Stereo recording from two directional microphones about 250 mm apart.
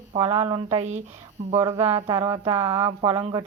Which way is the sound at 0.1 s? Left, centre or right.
Right.